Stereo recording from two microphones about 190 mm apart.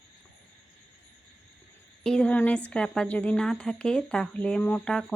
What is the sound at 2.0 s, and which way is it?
Speech, 5° left (ahead or behind).